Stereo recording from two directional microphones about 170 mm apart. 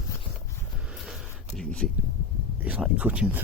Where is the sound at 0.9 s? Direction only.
Centre (ahead or behind).